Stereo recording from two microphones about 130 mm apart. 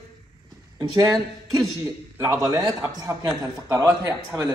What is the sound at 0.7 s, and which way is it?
A man's voice, 30° right (ahead or behind).